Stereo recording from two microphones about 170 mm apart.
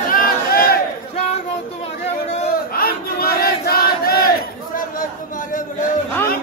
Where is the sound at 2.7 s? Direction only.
60° left (ahead or behind).